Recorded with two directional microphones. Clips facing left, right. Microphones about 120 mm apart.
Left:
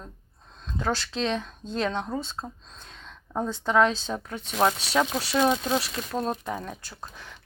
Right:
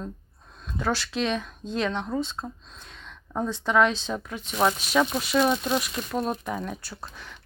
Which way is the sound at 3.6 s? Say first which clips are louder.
Even; 30° left (ahead or behind).